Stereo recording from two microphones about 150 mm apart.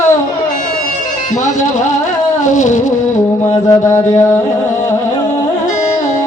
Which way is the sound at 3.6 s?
20° left (ahead or behind).